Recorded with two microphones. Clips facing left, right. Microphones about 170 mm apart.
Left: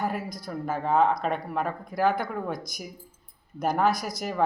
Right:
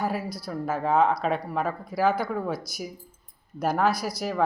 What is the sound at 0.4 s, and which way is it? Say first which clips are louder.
Speech: right 2 dB; centre (ahead or behind).